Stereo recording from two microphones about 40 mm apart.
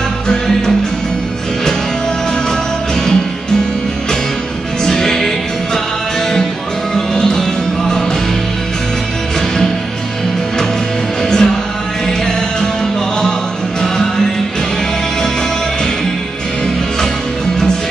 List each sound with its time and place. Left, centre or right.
4.8 s music: centre
7.2 s music: centre
11.2 s music: centre